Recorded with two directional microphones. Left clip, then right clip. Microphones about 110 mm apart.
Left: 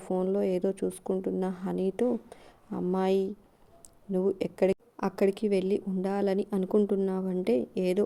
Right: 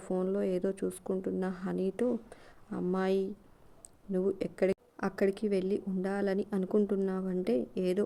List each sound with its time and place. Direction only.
0.0 s speech: 25° left (ahead or behind)